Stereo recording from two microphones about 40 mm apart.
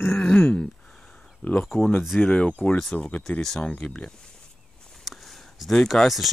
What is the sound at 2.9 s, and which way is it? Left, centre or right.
Speech, left.